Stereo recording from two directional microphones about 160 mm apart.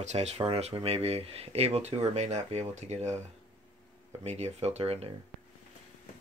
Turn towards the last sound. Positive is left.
turn(degrees=-40)  # may be behind; listen again after turning